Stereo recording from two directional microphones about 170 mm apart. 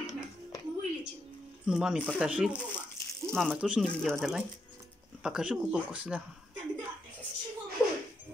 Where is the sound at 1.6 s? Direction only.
5° right (ahead or behind).